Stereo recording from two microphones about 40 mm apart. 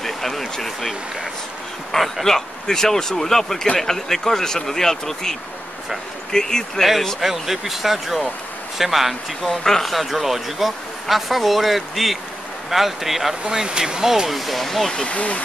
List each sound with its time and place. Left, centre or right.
0.0 s speech: centre
6.8 s speech: centre
9.6 s speech: centre
9.9 s speech: centre
13.5 s speech: centre
15.0 s speech: left